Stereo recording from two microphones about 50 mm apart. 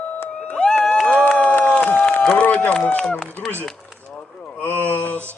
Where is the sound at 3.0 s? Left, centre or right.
Centre.